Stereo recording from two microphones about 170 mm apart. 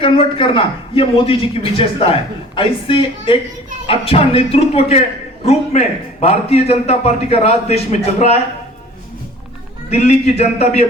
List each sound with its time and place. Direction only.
0.0 s a man's voice: 30° left (ahead or behind)
9.9 s a man's voice: 40° left (ahead or behind)